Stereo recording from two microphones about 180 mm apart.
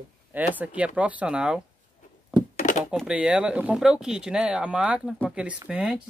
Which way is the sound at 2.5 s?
45° left (ahead or behind).